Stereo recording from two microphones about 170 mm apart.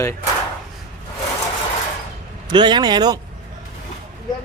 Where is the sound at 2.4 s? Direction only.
25° right (ahead or behind).